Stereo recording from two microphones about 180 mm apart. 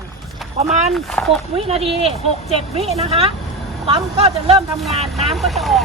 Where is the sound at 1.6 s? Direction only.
30° right (ahead or behind).